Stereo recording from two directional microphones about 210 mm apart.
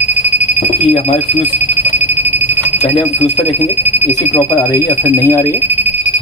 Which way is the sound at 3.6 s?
10° right (ahead or behind).